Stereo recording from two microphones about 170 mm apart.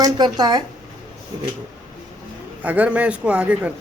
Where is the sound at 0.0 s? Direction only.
25° right (ahead or behind).